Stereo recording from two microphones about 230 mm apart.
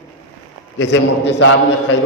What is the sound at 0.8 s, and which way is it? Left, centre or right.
Speech, left.